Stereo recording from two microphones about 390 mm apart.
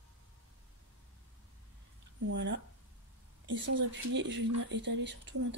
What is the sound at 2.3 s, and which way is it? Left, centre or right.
Speech, right.